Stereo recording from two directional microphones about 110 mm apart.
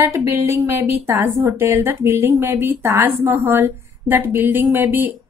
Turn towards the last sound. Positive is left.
turn(degrees=-20)  # may be behind; listen again after turning